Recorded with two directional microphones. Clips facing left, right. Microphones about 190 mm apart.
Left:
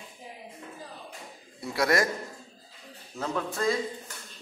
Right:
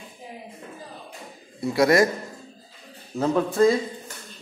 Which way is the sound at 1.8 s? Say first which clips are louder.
Right 7 dB; 20° right (ahead or behind).